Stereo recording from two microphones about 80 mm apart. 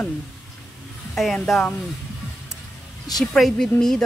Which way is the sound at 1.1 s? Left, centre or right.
Centre.